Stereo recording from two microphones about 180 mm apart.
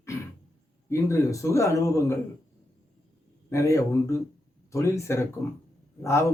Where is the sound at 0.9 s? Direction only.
15° left (ahead or behind).